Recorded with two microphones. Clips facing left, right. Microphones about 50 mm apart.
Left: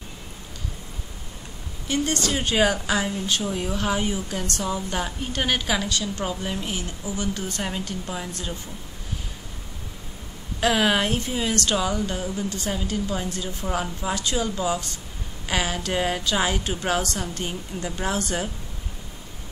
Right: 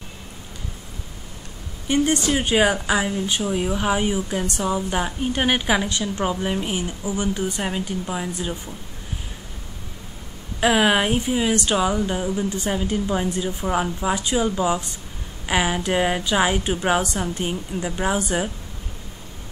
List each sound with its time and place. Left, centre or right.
1.9 s a woman's voice: centre
10.6 s a woman's voice: centre